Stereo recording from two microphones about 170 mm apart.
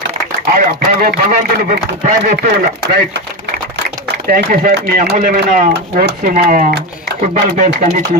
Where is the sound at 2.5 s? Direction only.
75° right (ahead or behind).